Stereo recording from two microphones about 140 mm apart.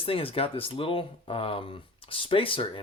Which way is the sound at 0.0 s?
40° left (ahead or behind).